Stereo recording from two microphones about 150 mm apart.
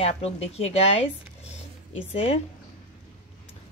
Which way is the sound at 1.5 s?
40° left (ahead or behind).